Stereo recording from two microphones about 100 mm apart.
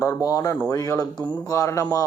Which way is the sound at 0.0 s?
35° left (ahead or behind).